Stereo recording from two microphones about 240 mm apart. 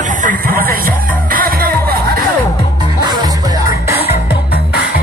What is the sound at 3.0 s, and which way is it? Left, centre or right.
Music, centre.